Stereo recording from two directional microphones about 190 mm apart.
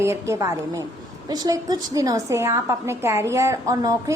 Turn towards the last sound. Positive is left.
turn(degrees=-15)  # may be behind; listen again after turning